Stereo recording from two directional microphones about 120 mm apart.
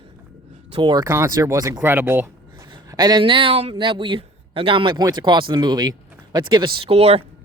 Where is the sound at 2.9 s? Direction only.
35° right (ahead or behind); by 7.2 s 55° right (ahead or behind).